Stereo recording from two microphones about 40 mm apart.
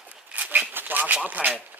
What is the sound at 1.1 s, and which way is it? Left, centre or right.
Speech, right.